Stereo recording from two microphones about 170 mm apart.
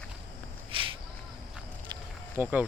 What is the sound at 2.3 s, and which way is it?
Speech, 10° right (ahead or behind).